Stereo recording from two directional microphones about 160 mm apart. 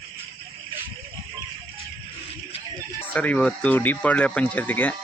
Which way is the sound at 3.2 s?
5° left (ahead or behind).